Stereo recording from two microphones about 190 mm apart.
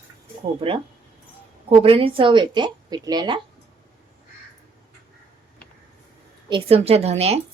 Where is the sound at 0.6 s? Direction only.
25° right (ahead or behind).